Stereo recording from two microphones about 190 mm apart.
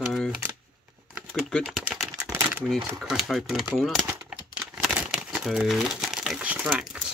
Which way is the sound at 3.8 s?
5° right (ahead or behind).